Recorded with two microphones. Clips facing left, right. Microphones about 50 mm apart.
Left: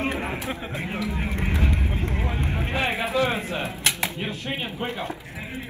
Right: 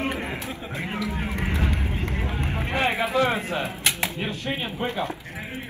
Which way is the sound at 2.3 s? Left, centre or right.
Right.